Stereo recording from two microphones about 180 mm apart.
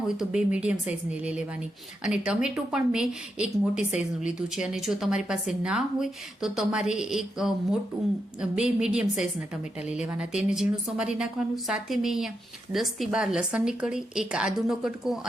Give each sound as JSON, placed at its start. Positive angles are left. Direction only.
{"t": 0.3, "sound": "a woman's voice", "side_deg": -5}